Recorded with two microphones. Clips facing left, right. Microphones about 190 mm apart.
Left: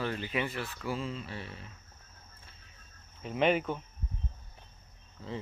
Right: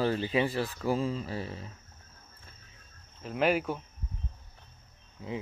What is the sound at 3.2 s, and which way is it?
Speech, 5° right (ahead or behind).